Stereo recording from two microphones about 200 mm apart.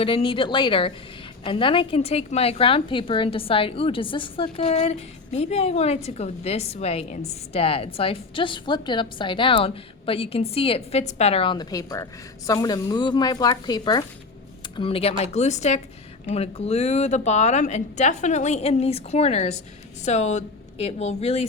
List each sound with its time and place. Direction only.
0.0 s a woman's voice: 25° left (ahead or behind)